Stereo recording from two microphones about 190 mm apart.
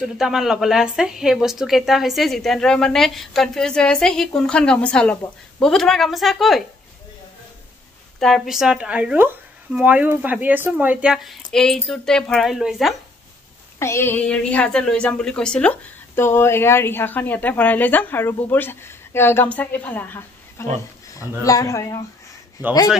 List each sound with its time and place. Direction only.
0.2 s speech: centre (ahead or behind)
8.2 s speech: centre (ahead or behind)
13.7 s a woman's voice: 15° left (ahead or behind)